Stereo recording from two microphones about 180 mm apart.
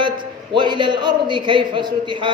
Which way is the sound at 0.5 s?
25° right (ahead or behind).